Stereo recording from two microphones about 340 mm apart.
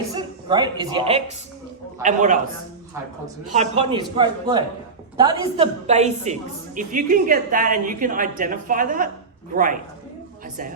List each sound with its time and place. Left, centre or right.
0.1 s a woman's voice: centre
3.5 s a woman's voice: centre